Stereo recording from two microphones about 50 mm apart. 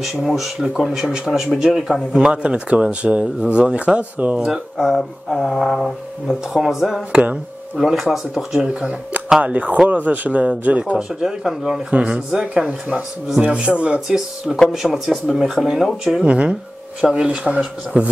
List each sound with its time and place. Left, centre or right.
0.0 s a man's voice: centre
2.3 s speech: right
4.5 s a man's voice: centre
4.9 s speech: centre
6.2 s speech: centre
9.4 s speech: right
11.0 s a man's voice: centre
13.4 s speech: right
14.0 s a man's voice: centre
17.0 s speech: right